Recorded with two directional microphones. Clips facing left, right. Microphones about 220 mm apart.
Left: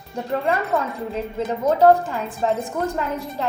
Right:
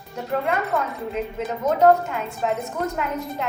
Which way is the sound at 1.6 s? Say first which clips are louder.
Left 1 dB; 30° left (ahead or behind).